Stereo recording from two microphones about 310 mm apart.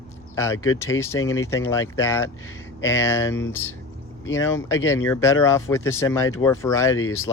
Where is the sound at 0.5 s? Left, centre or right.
Left.